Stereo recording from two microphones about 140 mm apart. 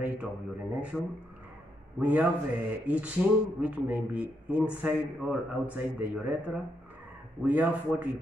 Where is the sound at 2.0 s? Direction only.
10° right (ahead or behind).